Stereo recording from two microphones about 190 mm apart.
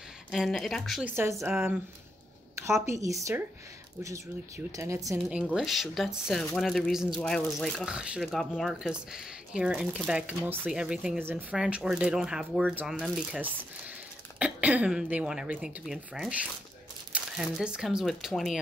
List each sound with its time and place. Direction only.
0.3 s speech: centre (ahead or behind)
1.0 s a woman's voice: 10° right (ahead or behind)
4.7 s speech: 15° right (ahead or behind)
5.4 s speech: centre (ahead or behind)